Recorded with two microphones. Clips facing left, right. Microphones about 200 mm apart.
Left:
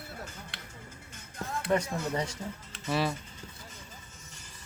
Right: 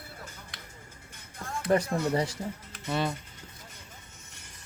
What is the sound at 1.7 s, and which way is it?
Speech, 35° right (ahead or behind).